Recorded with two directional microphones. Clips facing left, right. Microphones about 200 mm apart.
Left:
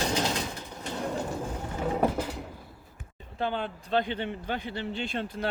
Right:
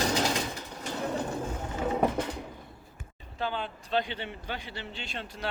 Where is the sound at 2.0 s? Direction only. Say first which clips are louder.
Left 1 dB; 5° left (ahead or behind).